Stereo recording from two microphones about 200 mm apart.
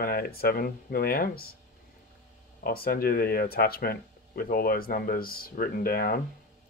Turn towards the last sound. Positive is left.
turn(degrees=50)  # may be behind; listen again after turning